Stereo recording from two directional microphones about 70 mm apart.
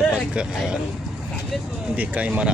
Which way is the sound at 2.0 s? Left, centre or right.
Centre.